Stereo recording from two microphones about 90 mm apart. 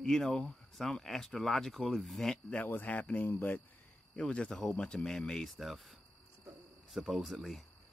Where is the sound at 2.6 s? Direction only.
20° left (ahead or behind).